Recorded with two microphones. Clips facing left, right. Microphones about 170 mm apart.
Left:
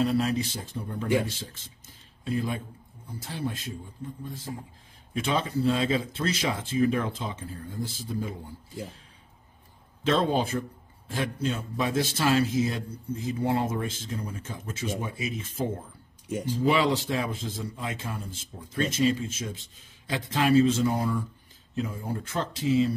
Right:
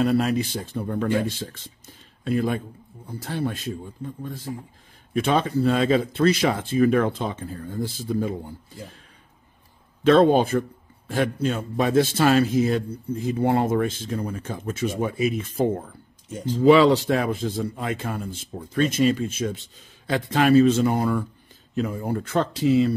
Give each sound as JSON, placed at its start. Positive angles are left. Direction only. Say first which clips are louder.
{"t": 0.0, "sound": "speech", "louder": "right 4 dB", "side_deg": -60}
{"t": 2.2, "sound": "speech", "louder": "right 6 dB", "side_deg": -60}
{"t": 10.0, "sound": "speech", "louder": "right 9 dB", "side_deg": -60}
{"t": 16.3, "sound": "speech", "louder": "right 1 dB", "side_deg": 10}
{"t": 16.6, "sound": "speech", "louder": "right 10 dB", "side_deg": -65}